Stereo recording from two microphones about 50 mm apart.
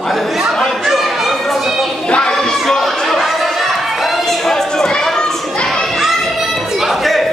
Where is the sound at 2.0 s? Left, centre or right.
Centre.